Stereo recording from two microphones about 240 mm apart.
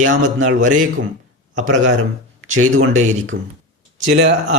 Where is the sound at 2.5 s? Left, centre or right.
Right.